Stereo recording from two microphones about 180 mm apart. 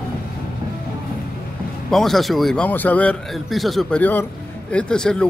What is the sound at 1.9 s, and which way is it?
A man's voice, centre (ahead or behind).